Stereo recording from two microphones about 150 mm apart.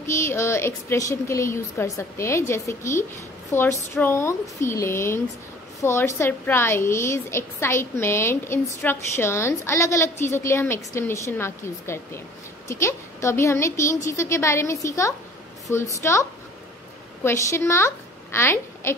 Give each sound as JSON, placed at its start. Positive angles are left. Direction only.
{"t": 0.0, "sound": "a woman's voice", "side_deg": 20}